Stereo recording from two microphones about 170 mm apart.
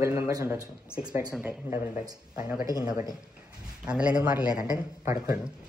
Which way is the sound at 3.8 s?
5° right (ahead or behind).